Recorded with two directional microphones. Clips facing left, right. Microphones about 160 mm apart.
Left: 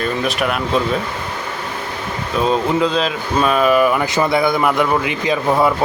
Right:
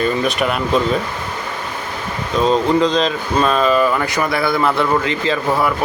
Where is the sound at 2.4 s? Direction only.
5° left (ahead or behind).